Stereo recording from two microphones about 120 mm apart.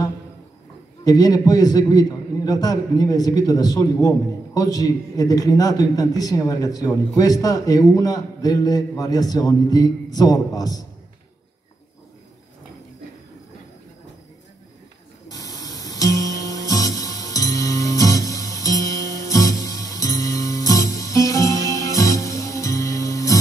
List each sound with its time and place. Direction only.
1.0 s a man's voice: 30° left (ahead or behind)
15.2 s music: 30° left (ahead or behind)